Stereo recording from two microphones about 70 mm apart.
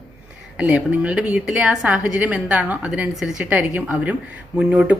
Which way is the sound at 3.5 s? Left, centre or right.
Right.